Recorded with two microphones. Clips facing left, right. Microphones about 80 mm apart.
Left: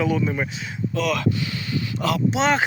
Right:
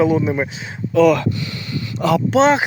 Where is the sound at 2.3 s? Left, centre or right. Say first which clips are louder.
Right 11 dB; right.